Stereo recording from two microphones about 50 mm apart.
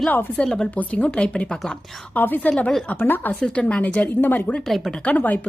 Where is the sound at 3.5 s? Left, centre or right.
Left.